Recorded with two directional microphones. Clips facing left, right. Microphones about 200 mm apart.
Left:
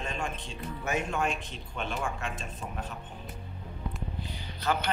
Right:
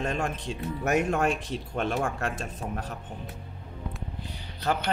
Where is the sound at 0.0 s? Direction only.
55° right (ahead or behind).